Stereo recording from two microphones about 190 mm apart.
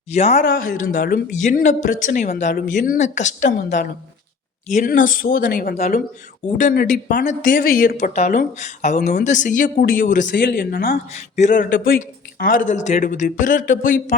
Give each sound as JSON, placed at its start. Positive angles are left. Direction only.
{"t": 0.1, "sound": "speech", "side_deg": 35}
{"t": 0.4, "sound": "speech", "side_deg": 45}
{"t": 11.3, "sound": "speech", "side_deg": 40}